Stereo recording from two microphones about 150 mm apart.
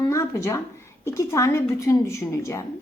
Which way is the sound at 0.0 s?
20° left (ahead or behind).